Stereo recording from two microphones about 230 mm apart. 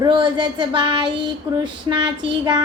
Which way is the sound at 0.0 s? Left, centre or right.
Right.